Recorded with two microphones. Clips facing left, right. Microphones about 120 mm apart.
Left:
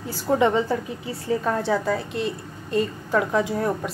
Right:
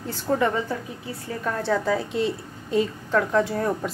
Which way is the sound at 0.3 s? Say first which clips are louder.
Left 3 dB; 20° left (ahead or behind).